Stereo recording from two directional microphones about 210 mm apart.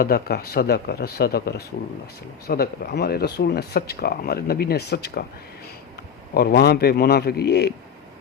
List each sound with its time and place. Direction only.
0.0 s speech: 45° left (ahead or behind)
6.3 s speech: 50° left (ahead or behind)